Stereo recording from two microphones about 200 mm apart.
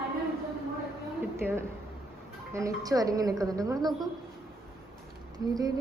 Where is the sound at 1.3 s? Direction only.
10° right (ahead or behind).